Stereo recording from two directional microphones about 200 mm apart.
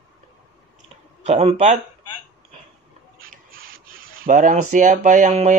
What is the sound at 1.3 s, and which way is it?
Speech, 35° right (ahead or behind).